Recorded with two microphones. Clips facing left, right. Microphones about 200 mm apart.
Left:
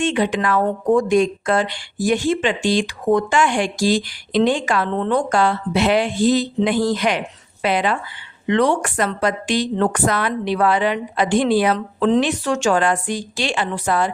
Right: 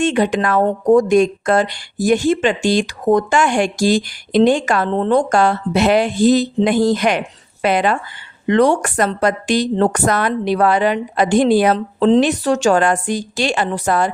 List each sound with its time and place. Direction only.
0.0 s speech: 45° right (ahead or behind)